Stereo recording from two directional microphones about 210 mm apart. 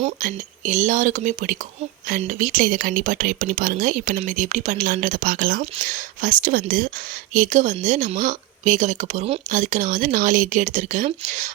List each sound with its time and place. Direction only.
0.0 s speech: 40° right (ahead or behind)